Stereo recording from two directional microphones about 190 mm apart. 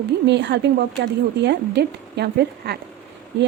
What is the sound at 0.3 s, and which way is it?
Speech, 65° right (ahead or behind).